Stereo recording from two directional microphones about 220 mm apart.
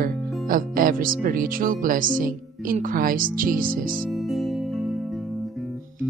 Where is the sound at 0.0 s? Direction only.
40° right (ahead or behind).